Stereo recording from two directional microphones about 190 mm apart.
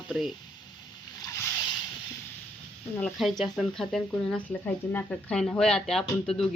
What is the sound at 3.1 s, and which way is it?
Speech, centre (ahead or behind).